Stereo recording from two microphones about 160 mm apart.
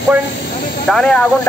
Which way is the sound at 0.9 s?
5° left (ahead or behind).